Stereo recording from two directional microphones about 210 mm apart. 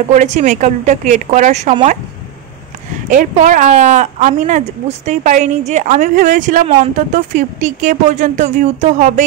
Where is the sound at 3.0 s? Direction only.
35° right (ahead or behind).